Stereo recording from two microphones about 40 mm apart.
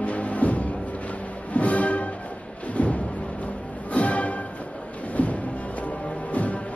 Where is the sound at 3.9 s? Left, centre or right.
Left.